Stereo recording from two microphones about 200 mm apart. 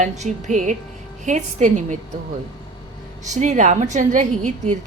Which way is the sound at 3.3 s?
35° right (ahead or behind).